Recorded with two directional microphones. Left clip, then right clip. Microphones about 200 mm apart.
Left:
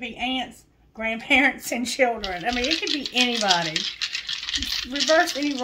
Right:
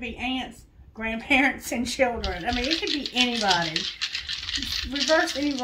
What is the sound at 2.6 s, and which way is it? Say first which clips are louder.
Speech: left 2 dB; 25° left (ahead or behind).